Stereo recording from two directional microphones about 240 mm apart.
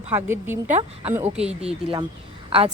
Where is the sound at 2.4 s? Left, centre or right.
Right.